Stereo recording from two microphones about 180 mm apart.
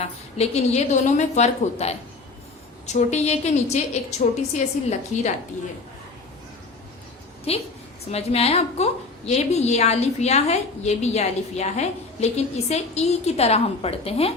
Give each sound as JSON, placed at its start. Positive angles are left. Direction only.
{"t": 0.0, "sound": "a woman's voice", "side_deg": 35}
{"t": 7.5, "sound": "a woman's voice", "side_deg": 35}